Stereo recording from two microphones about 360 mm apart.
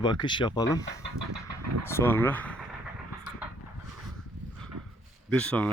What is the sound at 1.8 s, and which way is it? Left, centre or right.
Speech, centre.